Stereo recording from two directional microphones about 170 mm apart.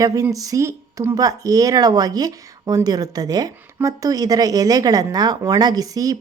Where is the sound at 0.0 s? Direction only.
20° right (ahead or behind).